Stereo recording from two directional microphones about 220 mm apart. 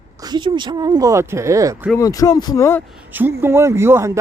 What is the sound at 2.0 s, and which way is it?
Speech, 15° left (ahead or behind).